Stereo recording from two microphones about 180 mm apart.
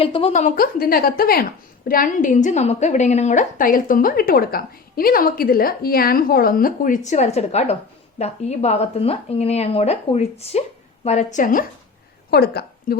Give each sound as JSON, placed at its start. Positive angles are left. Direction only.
{"t": 0.0, "sound": "a woman's voice", "side_deg": 30}
{"t": 12.3, "sound": "a woman's voice", "side_deg": 60}